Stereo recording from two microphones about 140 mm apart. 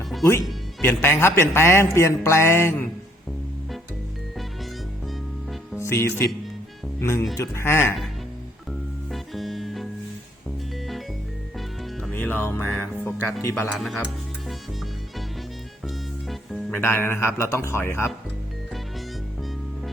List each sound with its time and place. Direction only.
0.8 s a man's voice: 15° left (ahead or behind)
5.8 s a man's voice: 20° left (ahead or behind)
9.1 s music: centre (ahead or behind)
11.5 s music: centre (ahead or behind)
12.1 s music: 10° left (ahead or behind)
12.7 s speech: 5° left (ahead or behind)
13.4 s a man's voice: 20° left (ahead or behind)
13.7 s speech: centre (ahead or behind)
16.2 s music: centre (ahead or behind)
16.7 s speech: 15° left (ahead or behind)
18.7 s music: centre (ahead or behind)